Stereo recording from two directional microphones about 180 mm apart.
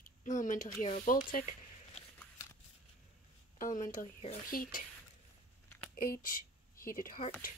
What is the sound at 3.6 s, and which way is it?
Speech, 45° left (ahead or behind).